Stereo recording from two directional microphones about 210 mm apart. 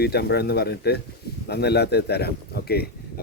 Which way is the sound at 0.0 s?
50° left (ahead or behind).